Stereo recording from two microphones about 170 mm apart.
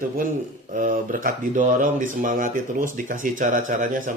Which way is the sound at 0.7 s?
55° right (ahead or behind).